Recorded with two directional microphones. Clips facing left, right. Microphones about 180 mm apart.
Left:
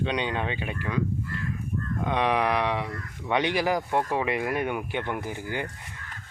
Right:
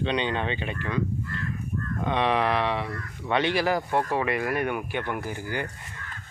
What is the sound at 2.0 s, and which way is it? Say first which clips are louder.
Speech: right 1 dB; 10° left (ahead or behind).